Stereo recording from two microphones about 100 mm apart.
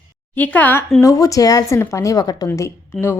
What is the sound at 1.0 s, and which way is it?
A woman's voice, 35° left (ahead or behind).